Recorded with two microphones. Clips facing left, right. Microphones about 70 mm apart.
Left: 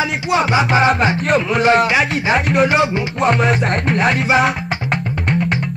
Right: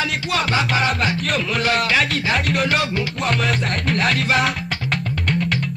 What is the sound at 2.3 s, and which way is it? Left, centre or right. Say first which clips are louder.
Music: left 6 dB; centre.